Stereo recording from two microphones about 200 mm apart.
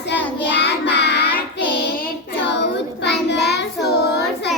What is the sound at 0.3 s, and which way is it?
Child singing, 60° left (ahead or behind).